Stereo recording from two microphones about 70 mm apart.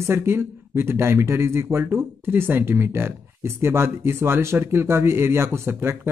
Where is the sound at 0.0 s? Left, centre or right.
Right.